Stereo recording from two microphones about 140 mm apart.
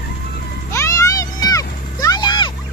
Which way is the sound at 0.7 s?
20° left (ahead or behind).